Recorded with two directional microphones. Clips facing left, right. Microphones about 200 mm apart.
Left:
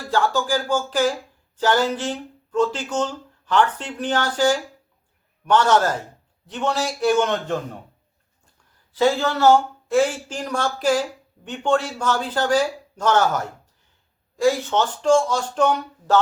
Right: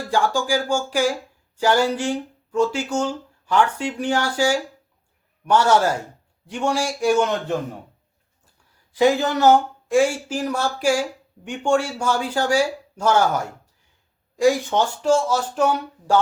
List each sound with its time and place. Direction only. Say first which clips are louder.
0.1 s speech: even; 10° right (ahead or behind)
8.9 s speech: right 2 dB; 15° right (ahead or behind)